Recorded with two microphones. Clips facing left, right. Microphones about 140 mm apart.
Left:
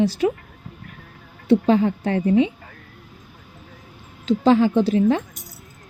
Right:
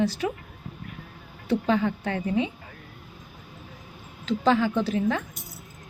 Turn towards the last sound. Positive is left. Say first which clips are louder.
# left 7 dB
turn(degrees=30)  # may be behind; listen again after turning